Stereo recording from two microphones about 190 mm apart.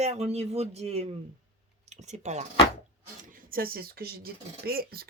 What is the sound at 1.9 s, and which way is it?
Speech, 35° right (ahead or behind).